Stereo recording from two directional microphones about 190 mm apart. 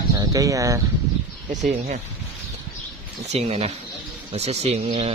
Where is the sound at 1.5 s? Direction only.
35° right (ahead or behind).